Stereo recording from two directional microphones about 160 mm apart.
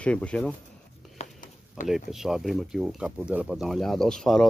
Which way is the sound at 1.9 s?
Centre (ahead or behind).